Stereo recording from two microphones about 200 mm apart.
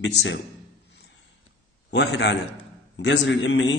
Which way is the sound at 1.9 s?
60° left (ahead or behind).